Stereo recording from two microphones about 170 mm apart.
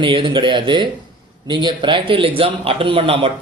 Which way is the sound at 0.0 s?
30° right (ahead or behind).